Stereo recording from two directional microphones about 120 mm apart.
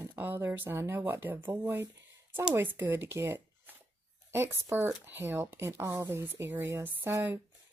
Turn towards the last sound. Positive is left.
turn(degrees=-15)  # may be behind; listen again after turning